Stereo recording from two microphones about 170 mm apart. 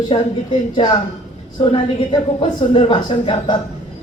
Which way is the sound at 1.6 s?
30° left (ahead or behind).